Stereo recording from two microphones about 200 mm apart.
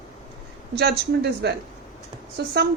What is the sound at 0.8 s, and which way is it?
Speech, 55° right (ahead or behind).